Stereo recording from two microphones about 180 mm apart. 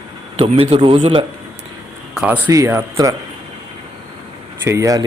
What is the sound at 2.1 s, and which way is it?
Speech, 10° right (ahead or behind).